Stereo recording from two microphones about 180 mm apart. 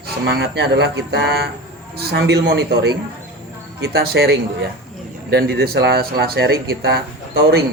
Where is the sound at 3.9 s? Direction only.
60° right (ahead or behind).